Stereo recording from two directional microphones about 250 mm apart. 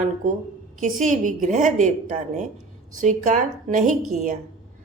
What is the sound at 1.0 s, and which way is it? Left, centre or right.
Speech, right.